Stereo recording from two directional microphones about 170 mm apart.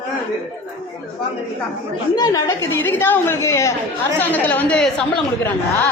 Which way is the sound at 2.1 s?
20° left (ahead or behind).